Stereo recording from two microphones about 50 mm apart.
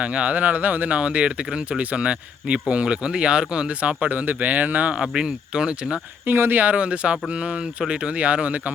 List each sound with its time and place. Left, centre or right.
0.0 s speech: right
6.2 s speech: right